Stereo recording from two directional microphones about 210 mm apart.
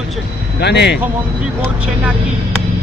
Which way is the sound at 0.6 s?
55° left (ahead or behind).